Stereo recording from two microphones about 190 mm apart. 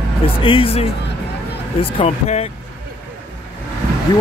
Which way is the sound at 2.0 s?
35° left (ahead or behind).